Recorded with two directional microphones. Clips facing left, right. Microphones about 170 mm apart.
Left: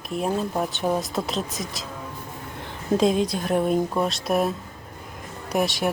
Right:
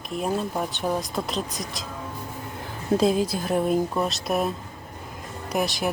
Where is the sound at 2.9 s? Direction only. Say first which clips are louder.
Left 1 dB; centre (ahead or behind).